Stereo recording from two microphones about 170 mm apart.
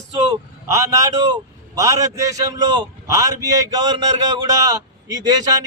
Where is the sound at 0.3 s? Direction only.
20° right (ahead or behind).